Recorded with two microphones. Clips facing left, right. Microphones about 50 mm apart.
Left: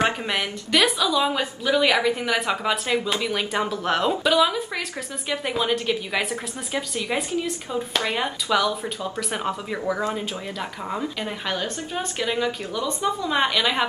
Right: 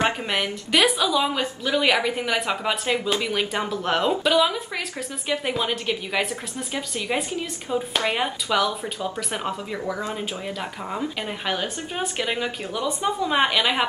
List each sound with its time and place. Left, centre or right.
0.0 s speech: centre
1.8 s speech: centre
10.9 s speech: centre